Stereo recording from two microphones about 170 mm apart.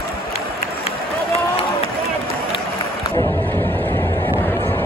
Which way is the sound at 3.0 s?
15° left (ahead or behind).